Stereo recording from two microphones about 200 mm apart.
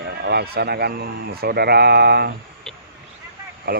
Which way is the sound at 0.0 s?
55° right (ahead or behind).